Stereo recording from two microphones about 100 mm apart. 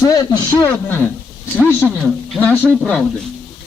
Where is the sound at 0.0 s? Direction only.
35° left (ahead or behind).